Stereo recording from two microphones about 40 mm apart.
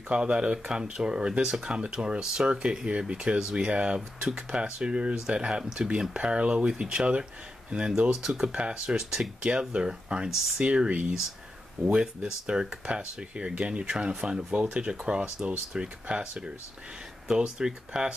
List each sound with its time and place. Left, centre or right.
0.1 s speech: right
8.5 s speech: right
8.9 s speech: centre
17.6 s speech: centre